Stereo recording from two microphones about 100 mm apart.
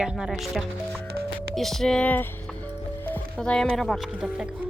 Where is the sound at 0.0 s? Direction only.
5° right (ahead or behind).